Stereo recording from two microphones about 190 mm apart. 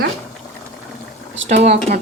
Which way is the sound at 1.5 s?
35° right (ahead or behind).